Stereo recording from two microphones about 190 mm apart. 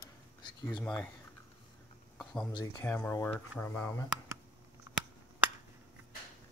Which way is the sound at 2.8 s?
10° left (ahead or behind).